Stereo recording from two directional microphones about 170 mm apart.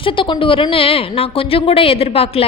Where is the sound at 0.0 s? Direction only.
30° left (ahead or behind).